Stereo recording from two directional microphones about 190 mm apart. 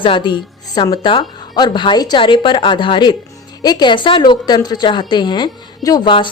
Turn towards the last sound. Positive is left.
turn(degrees=25)  # may be behind; listen again after turning